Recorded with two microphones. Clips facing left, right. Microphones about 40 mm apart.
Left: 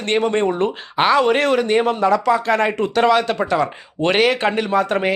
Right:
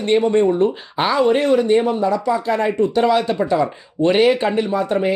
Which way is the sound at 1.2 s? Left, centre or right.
Left.